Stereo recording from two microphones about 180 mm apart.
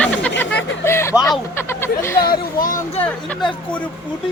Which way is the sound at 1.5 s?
15° left (ahead or behind).